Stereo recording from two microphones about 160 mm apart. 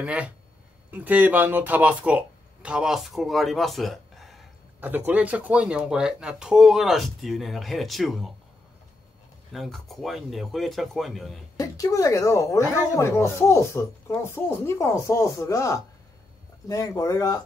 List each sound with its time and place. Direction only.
0.0 s speech: 10° right (ahead or behind)
4.7 s speech: 10° right (ahead or behind)
9.5 s speech: centre (ahead or behind)
11.5 s speech: 20° left (ahead or behind)